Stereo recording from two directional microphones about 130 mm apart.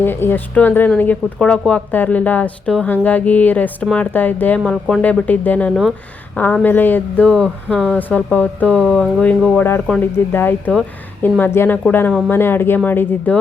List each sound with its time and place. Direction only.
0.0 s speech: 15° left (ahead or behind)